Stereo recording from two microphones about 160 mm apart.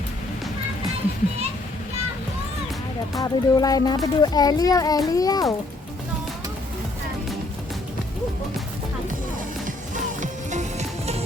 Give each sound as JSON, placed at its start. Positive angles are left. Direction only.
{"t": 3.2, "sound": "speech", "side_deg": 25}
{"t": 9.6, "sound": "music", "side_deg": -55}